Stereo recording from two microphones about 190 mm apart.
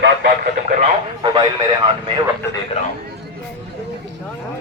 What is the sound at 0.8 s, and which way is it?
Radio, 25° right (ahead or behind).